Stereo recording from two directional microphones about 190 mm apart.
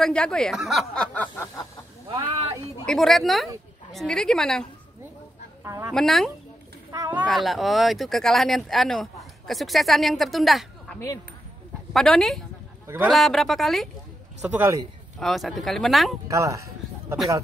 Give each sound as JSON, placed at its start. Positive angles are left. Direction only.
{"t": 0.0, "sound": "speech", "side_deg": 5}
{"t": 2.9, "sound": "speech", "side_deg": 0}
{"t": 5.6, "sound": "goose", "side_deg": -15}
{"t": 5.9, "sound": "speech", "side_deg": 0}
{"t": 6.9, "sound": "a sound", "side_deg": -15}
{"t": 7.2, "sound": "speech", "side_deg": 0}
{"t": 12.8, "sound": "speech", "side_deg": -15}
{"t": 13.1, "sound": "speech", "side_deg": 0}
{"t": 14.4, "sound": "a man's voice", "side_deg": -10}
{"t": 15.1, "sound": "speech", "side_deg": 0}
{"t": 16.3, "sound": "a sound", "side_deg": -15}